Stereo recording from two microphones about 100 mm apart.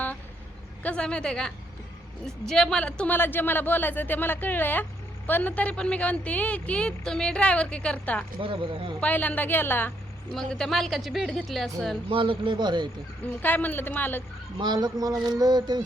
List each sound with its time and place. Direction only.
0.8 s speech: 10° left (ahead or behind)
3.2 s speech: 20° left (ahead or behind)
8.4 s speech: 60° right (ahead or behind)
9.0 s a woman's voice: 15° left (ahead or behind)
10.3 s speech: 5° left (ahead or behind)
12.0 s speech: 60° right (ahead or behind)
13.2 s a woman's voice: 20° left (ahead or behind)
14.6 s speech: 45° right (ahead or behind)